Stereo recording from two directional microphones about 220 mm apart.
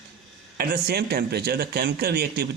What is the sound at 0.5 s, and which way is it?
Speech, 45° right (ahead or behind).